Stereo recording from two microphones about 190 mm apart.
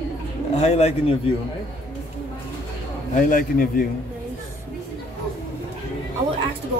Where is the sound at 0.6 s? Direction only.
35° left (ahead or behind).